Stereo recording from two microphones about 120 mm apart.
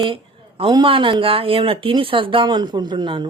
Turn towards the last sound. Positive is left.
turn(degrees=-40)  # may be behind; listen again after turning